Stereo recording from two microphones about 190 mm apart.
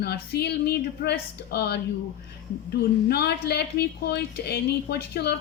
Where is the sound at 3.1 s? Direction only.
60° left (ahead or behind).